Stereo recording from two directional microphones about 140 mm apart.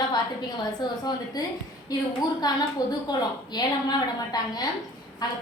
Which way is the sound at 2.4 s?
30° left (ahead or behind).